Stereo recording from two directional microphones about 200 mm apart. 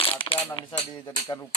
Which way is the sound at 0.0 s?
25° left (ahead or behind).